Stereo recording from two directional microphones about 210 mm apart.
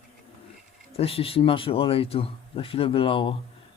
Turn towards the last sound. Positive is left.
turn(degrees=25)  # may be behind; listen again after turning